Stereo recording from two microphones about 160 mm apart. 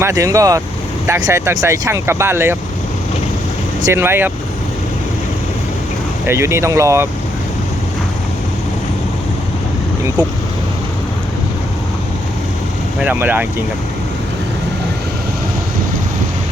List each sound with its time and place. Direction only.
0.0 s speech: 20° right (ahead or behind)
3.9 s speech: 15° right (ahead or behind)
6.2 s speech: 15° right (ahead or behind)
13.0 s speech: 10° right (ahead or behind)